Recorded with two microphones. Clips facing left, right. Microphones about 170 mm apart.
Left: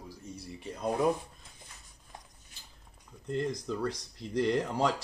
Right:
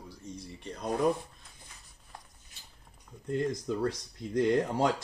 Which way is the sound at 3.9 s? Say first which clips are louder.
Right 2 dB; 50° right (ahead or behind).